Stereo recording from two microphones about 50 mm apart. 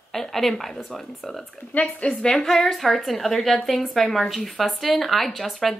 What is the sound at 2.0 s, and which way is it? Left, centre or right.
A woman's voice, centre.